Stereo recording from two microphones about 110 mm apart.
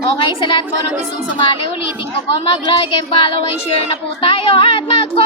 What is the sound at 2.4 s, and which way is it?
Speech, 55° left (ahead or behind).